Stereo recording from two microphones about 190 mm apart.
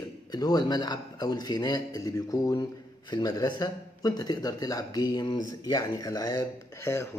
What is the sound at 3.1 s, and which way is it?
A man's voice, 20° left (ahead or behind).